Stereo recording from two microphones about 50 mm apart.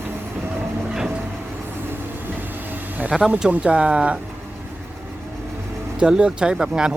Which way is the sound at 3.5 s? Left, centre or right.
Right.